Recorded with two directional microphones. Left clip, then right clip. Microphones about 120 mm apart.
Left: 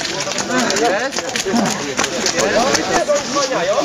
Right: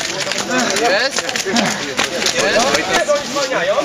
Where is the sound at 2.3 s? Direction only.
15° right (ahead or behind).